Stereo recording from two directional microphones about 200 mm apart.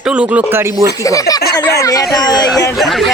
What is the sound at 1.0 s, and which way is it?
Speech, 15° left (ahead or behind).